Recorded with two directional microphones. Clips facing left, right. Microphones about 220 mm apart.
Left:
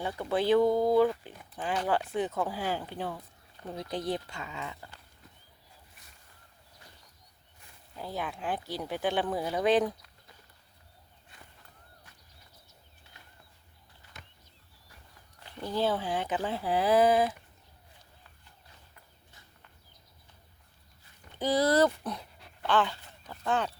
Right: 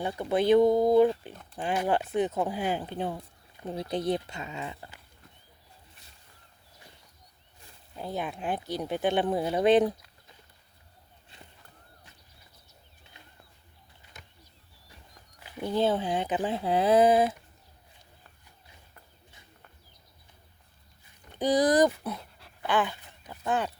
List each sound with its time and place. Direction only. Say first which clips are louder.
0.0 s speech: right 3 dB; 15° right (ahead or behind)
7.9 s speech: right 3 dB; 20° right (ahead or behind)
15.4 s a sound: right 4 dB; 10° right (ahead or behind)
15.6 s speech: right 3 dB; 20° right (ahead or behind)
21.3 s speech: right 2 dB; 15° right (ahead or behind)
22.6 s speech: even; 15° right (ahead or behind)